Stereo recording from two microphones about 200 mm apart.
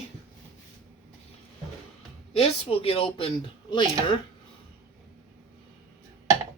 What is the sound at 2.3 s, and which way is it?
Speech, 30° left (ahead or behind).